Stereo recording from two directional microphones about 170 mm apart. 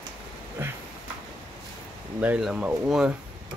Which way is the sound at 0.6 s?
10° right (ahead or behind).